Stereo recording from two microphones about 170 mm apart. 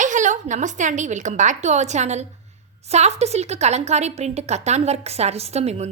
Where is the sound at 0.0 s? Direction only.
45° right (ahead or behind).